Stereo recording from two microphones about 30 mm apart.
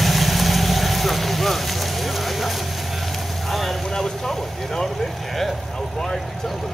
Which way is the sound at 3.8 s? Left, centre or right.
Centre.